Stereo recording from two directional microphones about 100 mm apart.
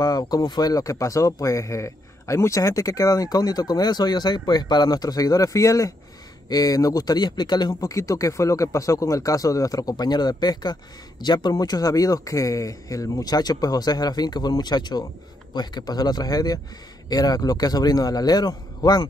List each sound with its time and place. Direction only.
0.0 s speech: 40° left (ahead or behind)